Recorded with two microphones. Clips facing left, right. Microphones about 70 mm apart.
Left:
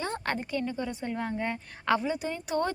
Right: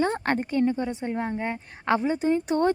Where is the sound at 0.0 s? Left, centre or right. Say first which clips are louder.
Right 7 dB; right.